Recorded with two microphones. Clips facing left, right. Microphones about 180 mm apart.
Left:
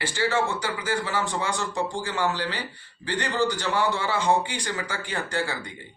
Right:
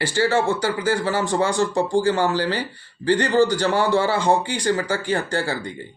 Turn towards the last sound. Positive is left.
turn(degrees=-30)  # may be behind; listen again after turning